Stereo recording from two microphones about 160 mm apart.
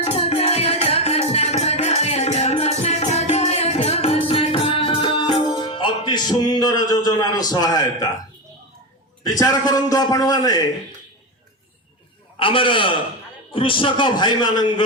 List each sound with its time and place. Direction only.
0.0 s music: 40° left (ahead or behind)
7.5 s a man's voice: 25° left (ahead or behind)
9.4 s a man's voice: 25° left (ahead or behind)
12.4 s a man's voice: 35° left (ahead or behind)